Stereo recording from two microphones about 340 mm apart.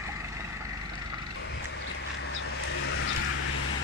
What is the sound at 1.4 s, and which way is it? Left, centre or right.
Vehicle, left.